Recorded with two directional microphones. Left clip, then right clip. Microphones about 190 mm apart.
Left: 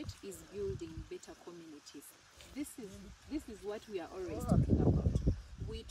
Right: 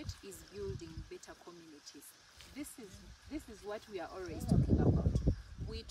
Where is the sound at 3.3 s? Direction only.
5° right (ahead or behind).